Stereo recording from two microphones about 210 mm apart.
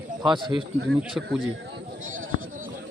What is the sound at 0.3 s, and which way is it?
Speech, 20° right (ahead or behind).